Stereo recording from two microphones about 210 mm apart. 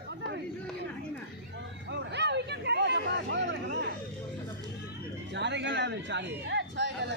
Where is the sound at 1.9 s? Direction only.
55° right (ahead or behind).